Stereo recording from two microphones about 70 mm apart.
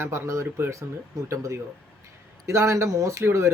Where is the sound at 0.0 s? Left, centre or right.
Right.